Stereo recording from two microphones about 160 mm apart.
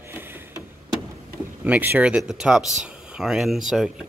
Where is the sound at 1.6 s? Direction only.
10° right (ahead or behind).